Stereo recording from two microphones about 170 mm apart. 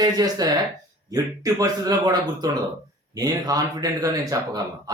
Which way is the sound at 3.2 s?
20° right (ahead or behind).